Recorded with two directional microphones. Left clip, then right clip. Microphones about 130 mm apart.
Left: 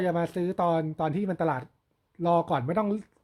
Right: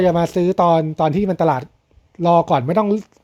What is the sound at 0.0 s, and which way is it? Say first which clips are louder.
Speech: right 12 dB; 35° right (ahead or behind).